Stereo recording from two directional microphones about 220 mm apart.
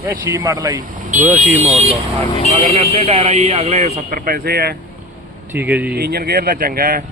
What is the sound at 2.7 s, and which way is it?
Speech, 25° right (ahead or behind).